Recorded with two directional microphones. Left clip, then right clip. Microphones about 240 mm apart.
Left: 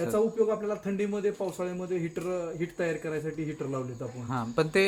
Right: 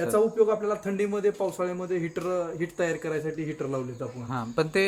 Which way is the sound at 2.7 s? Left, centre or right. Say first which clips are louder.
Right 4 dB; right.